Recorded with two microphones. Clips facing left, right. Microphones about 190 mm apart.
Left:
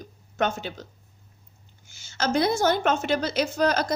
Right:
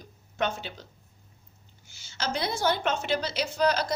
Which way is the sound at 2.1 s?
50° left (ahead or behind).